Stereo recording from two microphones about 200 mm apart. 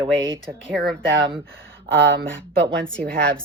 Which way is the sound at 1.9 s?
65° right (ahead or behind).